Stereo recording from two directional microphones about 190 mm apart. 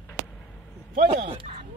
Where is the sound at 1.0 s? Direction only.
30° right (ahead or behind).